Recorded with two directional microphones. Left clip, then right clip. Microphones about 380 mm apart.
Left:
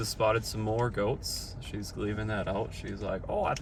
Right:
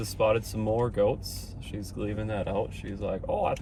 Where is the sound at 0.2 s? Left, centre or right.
Right.